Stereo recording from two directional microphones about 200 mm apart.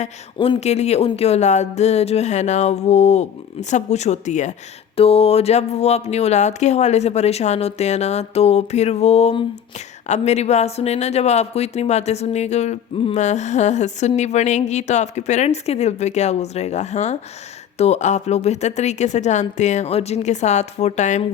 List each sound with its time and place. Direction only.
0.3 s speech: 25° left (ahead or behind)